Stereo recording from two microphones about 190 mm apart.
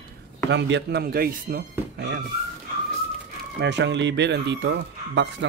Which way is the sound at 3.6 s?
65° right (ahead or behind).